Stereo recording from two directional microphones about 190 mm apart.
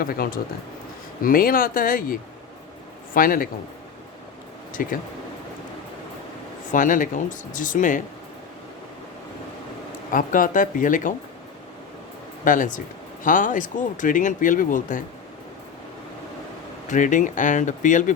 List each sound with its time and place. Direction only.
0.0 s speech: 50° left (ahead or behind)
3.2 s speech: 50° left (ahead or behind)
4.7 s speech: 45° left (ahead or behind)
6.7 s speech: 45° left (ahead or behind)
10.1 s speech: 45° left (ahead or behind)
12.5 s speech: 45° left (ahead or behind)
16.9 s speech: 40° left (ahead or behind)